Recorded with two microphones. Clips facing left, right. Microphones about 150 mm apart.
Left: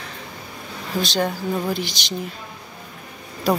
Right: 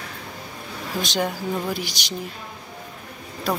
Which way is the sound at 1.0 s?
15° right (ahead or behind).